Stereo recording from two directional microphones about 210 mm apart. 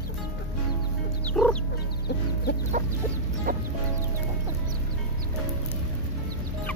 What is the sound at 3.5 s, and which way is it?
Music, 45° right (ahead or behind).